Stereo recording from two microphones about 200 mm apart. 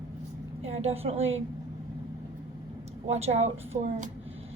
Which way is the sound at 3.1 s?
30° right (ahead or behind).